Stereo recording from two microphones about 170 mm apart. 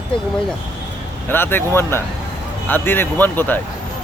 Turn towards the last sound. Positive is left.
turn(degrees=10)  # may be behind; listen again after turning